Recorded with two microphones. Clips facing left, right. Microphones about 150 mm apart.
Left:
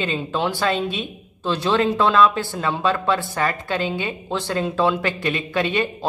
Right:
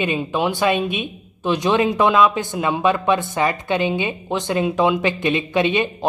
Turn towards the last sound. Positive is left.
turn(degrees=-20)  # may be behind; listen again after turning